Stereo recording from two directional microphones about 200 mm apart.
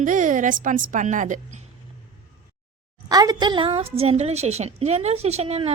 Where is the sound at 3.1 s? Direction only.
20° right (ahead or behind).